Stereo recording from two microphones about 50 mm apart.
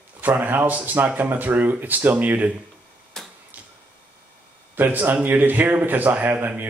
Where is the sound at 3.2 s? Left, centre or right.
Centre.